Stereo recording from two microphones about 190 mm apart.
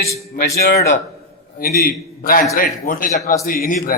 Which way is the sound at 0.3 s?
55° left (ahead or behind).